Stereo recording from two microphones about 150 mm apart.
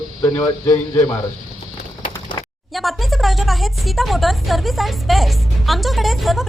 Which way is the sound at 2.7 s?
Centre (ahead or behind).